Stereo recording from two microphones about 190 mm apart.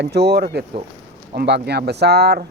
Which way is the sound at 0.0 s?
60° right (ahead or behind).